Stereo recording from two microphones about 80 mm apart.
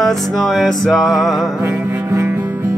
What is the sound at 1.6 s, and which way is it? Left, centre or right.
Music, right.